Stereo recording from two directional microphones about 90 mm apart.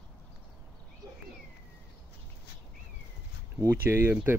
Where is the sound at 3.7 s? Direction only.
25° right (ahead or behind).